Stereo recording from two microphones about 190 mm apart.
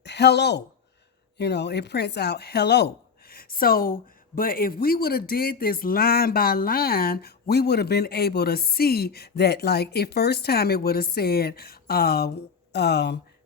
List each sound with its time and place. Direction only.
0.0 s a woman's voice: 60° left (ahead or behind)